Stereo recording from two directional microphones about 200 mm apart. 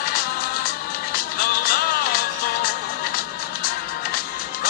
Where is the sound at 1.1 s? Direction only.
50° left (ahead or behind).